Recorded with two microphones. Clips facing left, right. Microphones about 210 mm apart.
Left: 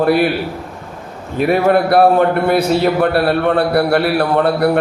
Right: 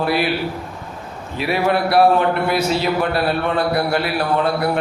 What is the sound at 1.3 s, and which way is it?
A man's voice, 50° left (ahead or behind).